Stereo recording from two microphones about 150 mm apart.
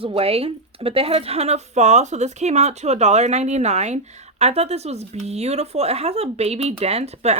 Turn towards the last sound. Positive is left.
turn(degrees=-45)  # may be behind; listen again after turning